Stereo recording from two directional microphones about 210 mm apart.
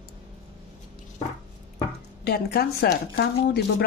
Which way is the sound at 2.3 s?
50° left (ahead or behind).